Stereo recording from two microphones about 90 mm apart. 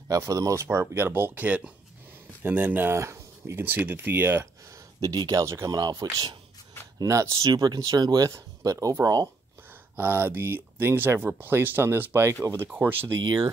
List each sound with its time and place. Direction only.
0.1 s speech: 40° right (ahead or behind)
0.7 s speech: 25° right (ahead or behind)
5.1 s speech: 45° right (ahead or behind)
5.4 s speech: 35° right (ahead or behind)
5.7 s speech: 45° right (ahead or behind)
9.9 s speech: 25° right (ahead or behind)